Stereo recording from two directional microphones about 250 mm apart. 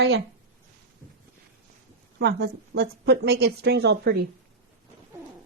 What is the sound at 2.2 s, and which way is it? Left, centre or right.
A woman's voice, right.